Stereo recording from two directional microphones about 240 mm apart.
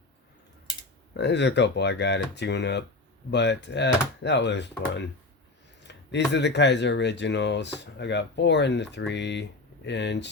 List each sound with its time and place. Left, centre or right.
1.1 s speech: left
5.9 s speech: left